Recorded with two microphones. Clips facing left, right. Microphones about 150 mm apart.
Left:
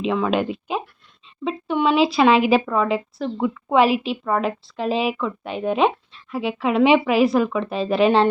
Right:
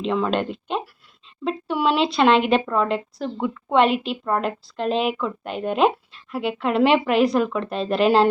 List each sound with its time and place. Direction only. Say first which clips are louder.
0.0 s speech: left 1 dB; 5° left (ahead or behind)